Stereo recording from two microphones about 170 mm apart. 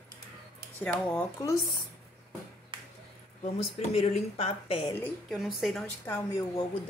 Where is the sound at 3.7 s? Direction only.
40° left (ahead or behind).